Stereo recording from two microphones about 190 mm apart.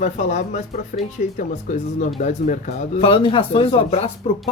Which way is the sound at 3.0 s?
30° left (ahead or behind).